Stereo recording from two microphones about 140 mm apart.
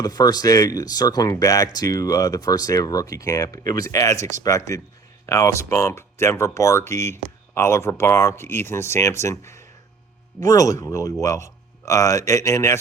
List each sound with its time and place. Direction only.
0.0 s speech: 25° left (ahead or behind)